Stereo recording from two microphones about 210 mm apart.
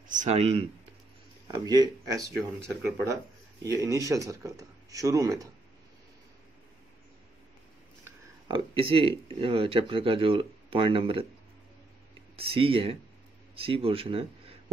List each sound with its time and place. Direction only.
0.1 s speech: 35° right (ahead or behind)
1.5 s speech: 20° right (ahead or behind)
3.6 s speech: 15° right (ahead or behind)
8.0 s speech: 20° right (ahead or behind)
12.4 s speech: 25° right (ahead or behind)